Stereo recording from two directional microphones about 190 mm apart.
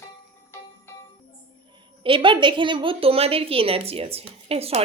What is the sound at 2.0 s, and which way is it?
A woman's voice, 25° right (ahead or behind).